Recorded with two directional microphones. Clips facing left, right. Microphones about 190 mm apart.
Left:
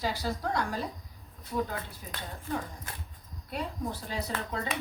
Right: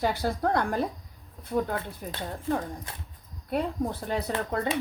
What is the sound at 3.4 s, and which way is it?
A woman's voice, 55° right (ahead or behind).